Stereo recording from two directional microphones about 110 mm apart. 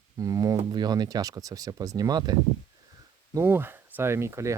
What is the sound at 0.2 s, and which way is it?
Speech, 30° right (ahead or behind).